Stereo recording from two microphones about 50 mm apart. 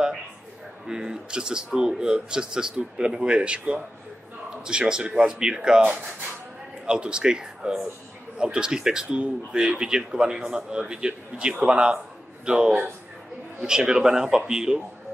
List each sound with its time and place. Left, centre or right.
0.8 s speech: centre
6.9 s speech: centre